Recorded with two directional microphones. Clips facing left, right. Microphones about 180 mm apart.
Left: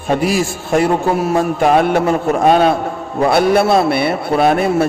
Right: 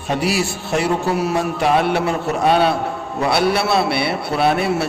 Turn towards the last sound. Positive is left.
turn(degrees=45)  # may be behind; listen again after turning